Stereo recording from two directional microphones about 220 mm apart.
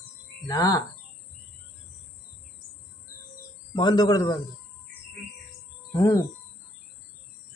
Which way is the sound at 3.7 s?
20° left (ahead or behind).